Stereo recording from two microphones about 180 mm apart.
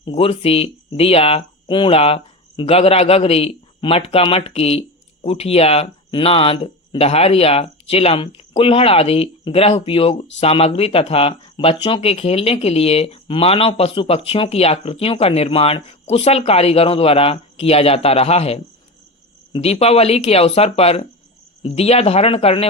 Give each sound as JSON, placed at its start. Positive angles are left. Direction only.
{"t": 0.0, "sound": "speech", "side_deg": 30}